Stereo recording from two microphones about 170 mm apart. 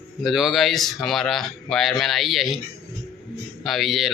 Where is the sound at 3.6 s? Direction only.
Centre (ahead or behind).